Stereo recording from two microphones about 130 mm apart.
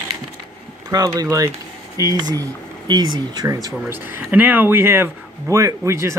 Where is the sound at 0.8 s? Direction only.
25° right (ahead or behind).